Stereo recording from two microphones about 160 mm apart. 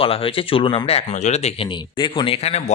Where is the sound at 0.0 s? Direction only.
35° left (ahead or behind).